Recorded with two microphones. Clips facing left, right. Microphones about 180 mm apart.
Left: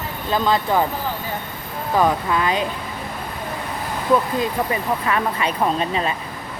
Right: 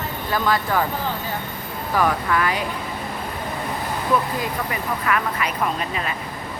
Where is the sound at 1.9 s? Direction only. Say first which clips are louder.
Left 2 dB; 20° left (ahead or behind).